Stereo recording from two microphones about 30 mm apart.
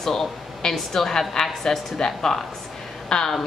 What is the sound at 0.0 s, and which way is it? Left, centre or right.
A woman's voice, centre.